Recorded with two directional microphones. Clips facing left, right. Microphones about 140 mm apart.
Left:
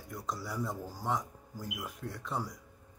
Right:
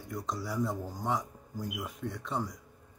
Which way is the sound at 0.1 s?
Centre (ahead or behind).